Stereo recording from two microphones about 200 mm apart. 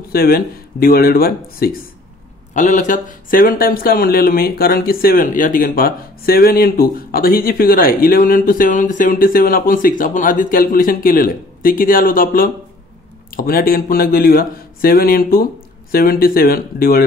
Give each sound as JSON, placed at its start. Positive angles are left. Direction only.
{"t": 0.1, "sound": "speech", "side_deg": 50}
{"t": 2.5, "sound": "speech", "side_deg": 35}